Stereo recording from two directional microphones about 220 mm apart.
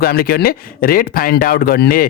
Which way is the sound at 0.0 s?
45° left (ahead or behind).